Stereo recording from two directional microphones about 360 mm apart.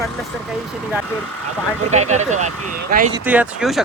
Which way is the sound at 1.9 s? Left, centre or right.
Centre.